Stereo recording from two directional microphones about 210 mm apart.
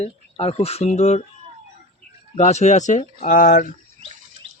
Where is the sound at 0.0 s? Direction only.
30° left (ahead or behind).